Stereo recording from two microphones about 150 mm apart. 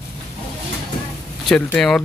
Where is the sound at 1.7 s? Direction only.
Centre (ahead or behind).